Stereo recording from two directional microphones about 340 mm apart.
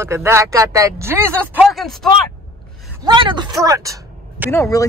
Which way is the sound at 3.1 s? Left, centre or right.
Centre.